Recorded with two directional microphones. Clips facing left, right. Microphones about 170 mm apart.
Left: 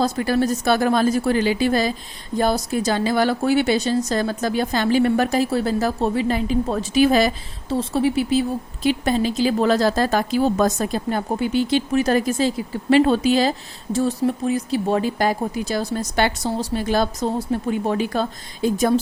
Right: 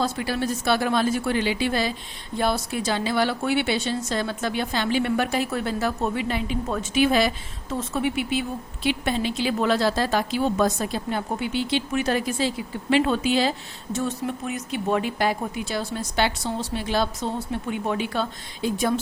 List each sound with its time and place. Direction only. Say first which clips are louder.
0.0 s a woman's voice: left 6 dB; 40° left (ahead or behind)